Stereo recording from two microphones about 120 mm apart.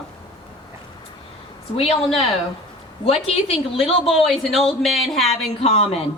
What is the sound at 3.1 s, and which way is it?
A woman's voice, 55° left (ahead or behind).